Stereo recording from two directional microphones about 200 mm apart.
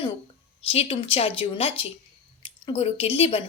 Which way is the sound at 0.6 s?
30° left (ahead or behind).